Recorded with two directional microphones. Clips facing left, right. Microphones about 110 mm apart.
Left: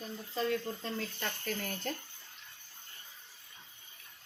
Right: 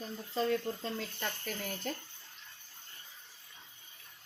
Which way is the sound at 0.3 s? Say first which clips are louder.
Right 2 dB; 25° right (ahead or behind).